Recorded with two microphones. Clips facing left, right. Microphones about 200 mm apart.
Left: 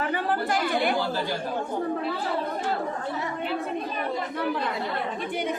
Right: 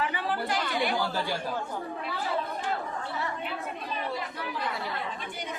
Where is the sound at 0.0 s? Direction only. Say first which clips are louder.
Left 4 dB; 50° left (ahead or behind).